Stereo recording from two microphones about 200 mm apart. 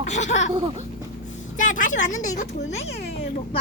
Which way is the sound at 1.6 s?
40° left (ahead or behind).